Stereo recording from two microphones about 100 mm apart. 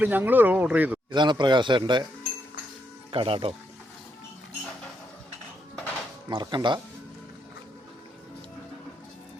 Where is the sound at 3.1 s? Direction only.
65° right (ahead or behind).